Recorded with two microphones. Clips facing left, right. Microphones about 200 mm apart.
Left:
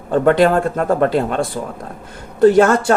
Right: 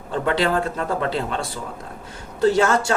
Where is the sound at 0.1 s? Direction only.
50° left (ahead or behind).